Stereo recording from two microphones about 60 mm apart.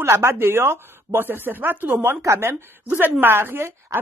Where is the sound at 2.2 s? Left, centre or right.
Right.